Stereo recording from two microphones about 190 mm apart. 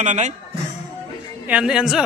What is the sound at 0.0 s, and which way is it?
Speech, 40° right (ahead or behind).